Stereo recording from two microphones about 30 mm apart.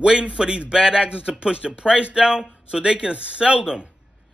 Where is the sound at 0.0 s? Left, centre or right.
Right.